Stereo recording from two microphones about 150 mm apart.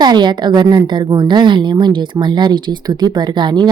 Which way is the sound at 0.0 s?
30° right (ahead or behind).